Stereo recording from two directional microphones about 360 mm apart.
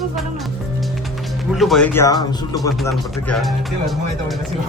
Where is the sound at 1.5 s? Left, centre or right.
Centre.